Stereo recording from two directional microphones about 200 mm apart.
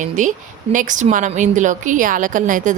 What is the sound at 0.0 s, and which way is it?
Speech, 40° right (ahead or behind).